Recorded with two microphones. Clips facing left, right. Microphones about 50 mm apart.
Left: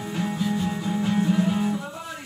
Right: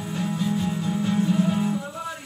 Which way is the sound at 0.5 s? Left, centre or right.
Centre.